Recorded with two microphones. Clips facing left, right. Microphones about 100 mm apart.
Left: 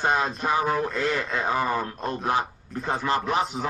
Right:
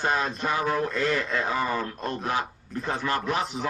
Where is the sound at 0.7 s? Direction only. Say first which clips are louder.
Even; 5° left (ahead or behind).